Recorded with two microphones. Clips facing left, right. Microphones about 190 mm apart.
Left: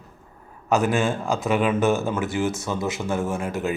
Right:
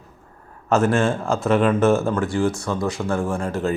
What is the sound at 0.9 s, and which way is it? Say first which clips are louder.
Speech: right 3 dB; centre (ahead or behind).